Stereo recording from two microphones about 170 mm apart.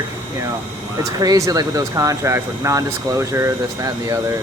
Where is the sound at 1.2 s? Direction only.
20° right (ahead or behind).